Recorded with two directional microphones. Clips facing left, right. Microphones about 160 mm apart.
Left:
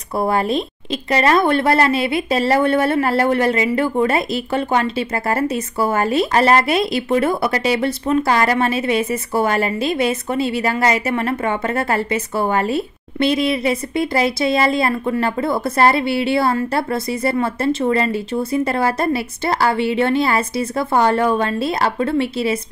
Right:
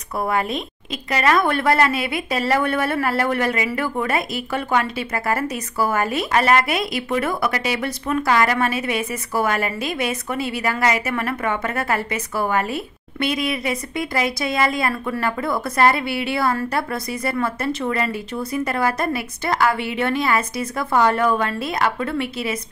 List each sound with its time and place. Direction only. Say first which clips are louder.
0.2 s speech: left 4 dB; 30° left (ahead or behind)